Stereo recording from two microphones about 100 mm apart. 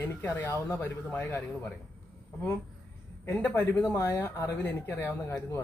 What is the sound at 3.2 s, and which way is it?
Speech, 20° left (ahead or behind).